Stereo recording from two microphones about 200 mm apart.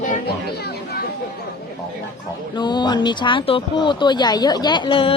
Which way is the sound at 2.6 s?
20° left (ahead or behind).